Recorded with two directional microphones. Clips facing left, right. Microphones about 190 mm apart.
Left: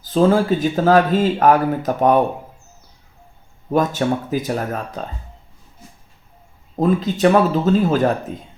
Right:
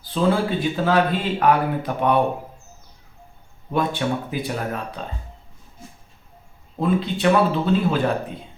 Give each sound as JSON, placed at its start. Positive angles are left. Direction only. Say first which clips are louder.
{"t": 0.0, "sound": "speech", "louder": "left 5 dB", "side_deg": 40}
{"t": 3.7, "sound": "speech", "louder": "left 4 dB", "side_deg": 40}
{"t": 6.7, "sound": "speech", "louder": "left 4 dB", "side_deg": 40}